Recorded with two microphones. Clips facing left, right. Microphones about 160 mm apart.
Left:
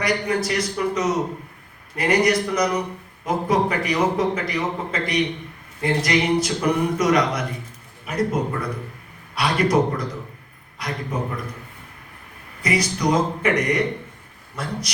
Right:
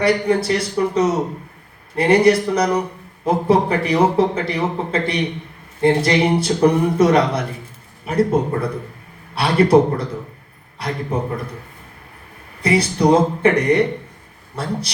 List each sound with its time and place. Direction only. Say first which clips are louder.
0.0 s a man's voice: right 6 dB; 30° right (ahead or behind)
12.6 s a man's voice: right 6 dB; 30° right (ahead or behind)